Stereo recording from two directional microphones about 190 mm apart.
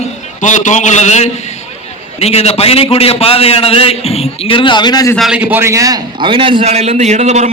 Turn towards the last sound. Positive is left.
turn(degrees=-35)  # may be behind; listen again after turning